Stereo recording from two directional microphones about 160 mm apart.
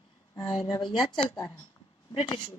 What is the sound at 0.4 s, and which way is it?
A woman's voice, 30° left (ahead or behind).